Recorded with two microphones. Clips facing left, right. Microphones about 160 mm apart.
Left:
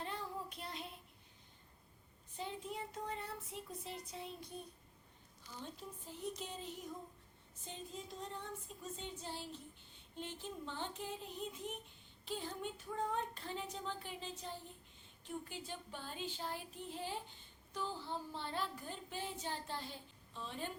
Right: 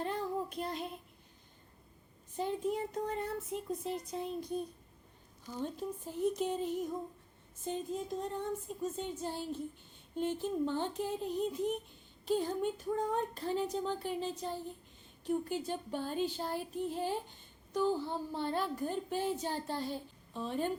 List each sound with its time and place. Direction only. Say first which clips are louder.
0.0 s child singing: right 9 dB; 50° right (ahead or behind)
2.3 s speech: right 10 dB; 50° right (ahead or behind)
5.5 s speech: right 11 dB; 50° right (ahead or behind)